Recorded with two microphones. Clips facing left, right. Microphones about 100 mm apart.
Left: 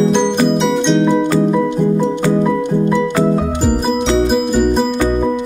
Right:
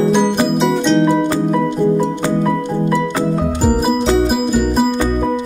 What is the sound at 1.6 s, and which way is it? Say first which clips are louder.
Music: even; 15° left (ahead or behind).